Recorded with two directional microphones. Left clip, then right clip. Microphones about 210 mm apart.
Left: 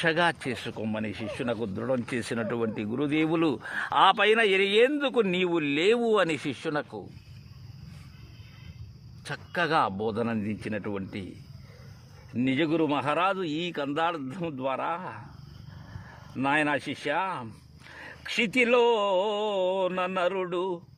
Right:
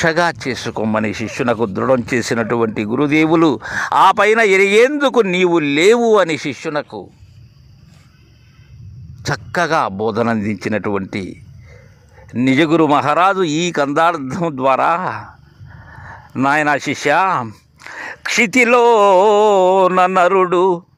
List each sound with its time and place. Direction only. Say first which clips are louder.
0.0 s a man's voice: right 10 dB; 30° right (ahead or behind)
9.3 s speech: right 10 dB; 35° right (ahead or behind)
12.5 s speech: right 14 dB; 40° right (ahead or behind)
16.3 s speech: right 11 dB; 35° right (ahead or behind)